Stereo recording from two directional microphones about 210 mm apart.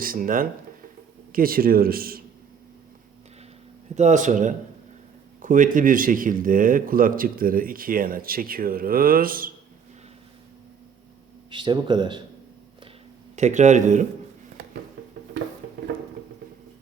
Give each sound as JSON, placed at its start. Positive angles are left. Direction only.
{"t": 0.0, "sound": "a man's voice", "side_deg": -45}
{"t": 3.9, "sound": "speech", "side_deg": -35}
{"t": 11.5, "sound": "speech", "side_deg": -20}
{"t": 13.3, "sound": "speech", "side_deg": -35}